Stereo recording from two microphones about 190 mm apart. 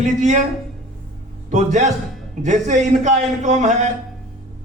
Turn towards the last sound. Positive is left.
turn(degrees=-40)  # may be behind; listen again after turning